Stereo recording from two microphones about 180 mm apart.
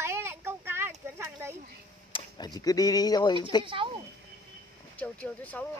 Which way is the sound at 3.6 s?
30° right (ahead or behind).